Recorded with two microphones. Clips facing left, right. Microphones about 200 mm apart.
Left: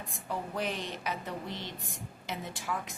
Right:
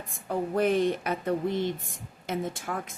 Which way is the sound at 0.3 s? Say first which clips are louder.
Right 10 dB; 55° right (ahead or behind).